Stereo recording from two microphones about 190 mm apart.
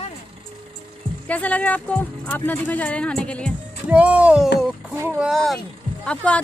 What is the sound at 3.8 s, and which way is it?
A woman's voice, 5° right (ahead or behind).